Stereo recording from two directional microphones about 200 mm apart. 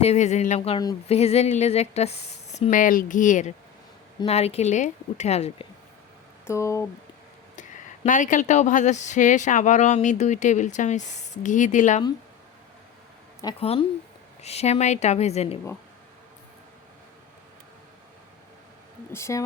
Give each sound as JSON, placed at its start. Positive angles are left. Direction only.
{"t": 0.0, "sound": "speech", "side_deg": 35}
{"t": 6.5, "sound": "speech", "side_deg": 15}
{"t": 7.5, "sound": "speech", "side_deg": 40}
{"t": 13.4, "sound": "speech", "side_deg": 25}
{"t": 19.1, "sound": "speech", "side_deg": 15}